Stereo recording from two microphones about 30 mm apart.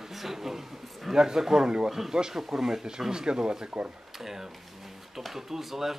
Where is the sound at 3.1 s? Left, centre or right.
Right.